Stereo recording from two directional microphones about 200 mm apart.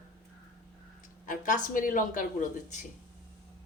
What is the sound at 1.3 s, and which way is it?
A woman's voice, 40° left (ahead or behind).